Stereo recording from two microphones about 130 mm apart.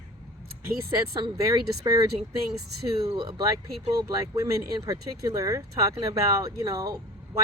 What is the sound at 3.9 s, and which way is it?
Speech, 30° right (ahead or behind).